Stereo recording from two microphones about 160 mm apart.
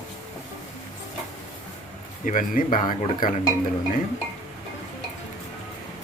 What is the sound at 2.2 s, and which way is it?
Speech, 60° left (ahead or behind).